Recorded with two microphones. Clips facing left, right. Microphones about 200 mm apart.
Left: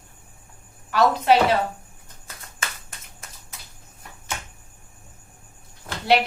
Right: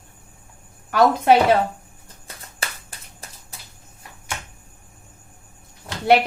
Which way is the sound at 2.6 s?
35° right (ahead or behind).